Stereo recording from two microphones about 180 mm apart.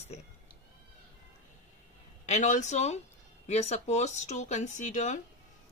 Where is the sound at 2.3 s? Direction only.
45° left (ahead or behind).